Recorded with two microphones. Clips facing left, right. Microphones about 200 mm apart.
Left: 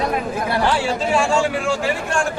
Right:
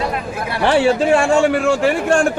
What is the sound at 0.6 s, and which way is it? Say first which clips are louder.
A man's voice: right 10 dB; 60° right (ahead or behind).